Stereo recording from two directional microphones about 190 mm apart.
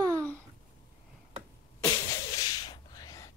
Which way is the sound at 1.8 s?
20° left (ahead or behind).